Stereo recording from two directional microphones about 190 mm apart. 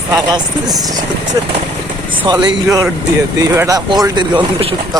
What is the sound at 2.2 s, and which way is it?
Speech, 25° right (ahead or behind).